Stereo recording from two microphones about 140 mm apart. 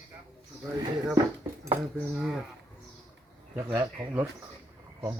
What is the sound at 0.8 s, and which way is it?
Speech, 25° right (ahead or behind).